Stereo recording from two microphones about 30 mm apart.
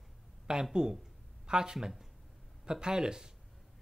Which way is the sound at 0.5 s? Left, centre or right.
Right.